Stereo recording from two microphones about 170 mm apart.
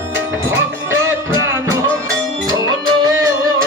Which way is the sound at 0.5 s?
15° right (ahead or behind).